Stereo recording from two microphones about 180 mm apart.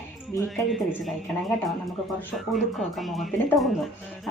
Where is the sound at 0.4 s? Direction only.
Centre (ahead or behind).